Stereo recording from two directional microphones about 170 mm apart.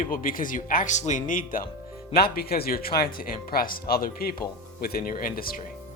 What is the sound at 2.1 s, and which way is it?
Speech, 65° left (ahead or behind).